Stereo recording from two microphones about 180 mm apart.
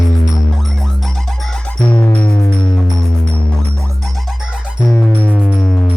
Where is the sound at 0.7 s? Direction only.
Centre (ahead or behind).